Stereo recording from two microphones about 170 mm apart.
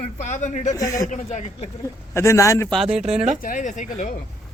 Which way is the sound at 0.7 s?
20° left (ahead or behind).